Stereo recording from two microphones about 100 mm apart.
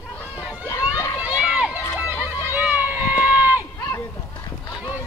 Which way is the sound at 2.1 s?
25° left (ahead or behind).